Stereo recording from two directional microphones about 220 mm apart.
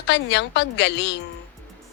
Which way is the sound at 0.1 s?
50° left (ahead or behind).